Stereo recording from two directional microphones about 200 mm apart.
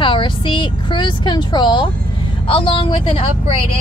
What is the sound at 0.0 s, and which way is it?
Speech, 25° left (ahead or behind).